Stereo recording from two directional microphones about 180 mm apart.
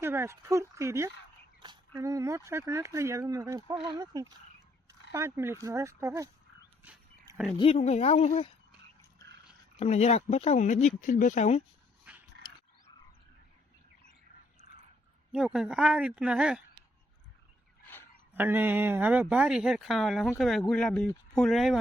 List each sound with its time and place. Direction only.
0.0 s speech: 15° right (ahead or behind)
7.3 s a sound: 15° right (ahead or behind)
7.6 s speech: 35° left (ahead or behind)
9.7 s speech: 35° left (ahead or behind)
12.1 s dog: 10° right (ahead or behind)
15.3 s speech: 5° right (ahead or behind)
17.8 s a sound: 10° left (ahead or behind)
18.3 s speech: 10° right (ahead or behind)